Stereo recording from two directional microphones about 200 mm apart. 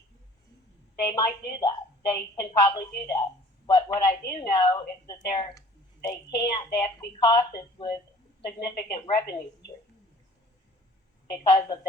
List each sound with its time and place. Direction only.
1.0 s a woman's voice: 20° left (ahead or behind)
11.3 s a woman's voice: 20° left (ahead or behind)